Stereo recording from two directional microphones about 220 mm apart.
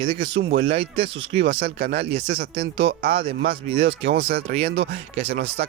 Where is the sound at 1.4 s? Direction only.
55° right (ahead or behind).